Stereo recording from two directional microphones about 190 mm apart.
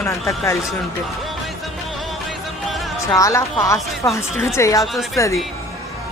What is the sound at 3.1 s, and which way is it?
Speech, 15° left (ahead or behind).